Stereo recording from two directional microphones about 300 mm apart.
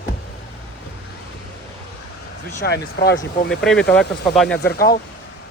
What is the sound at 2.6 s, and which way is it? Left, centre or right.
Speech, left.